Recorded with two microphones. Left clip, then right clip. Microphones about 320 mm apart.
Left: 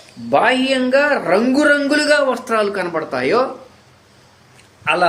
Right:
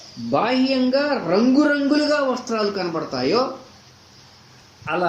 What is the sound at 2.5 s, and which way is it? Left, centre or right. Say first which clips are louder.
Speech: left 5 dB; left.